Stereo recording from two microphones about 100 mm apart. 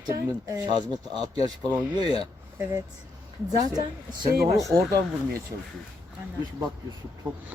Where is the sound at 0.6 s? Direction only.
45° right (ahead or behind).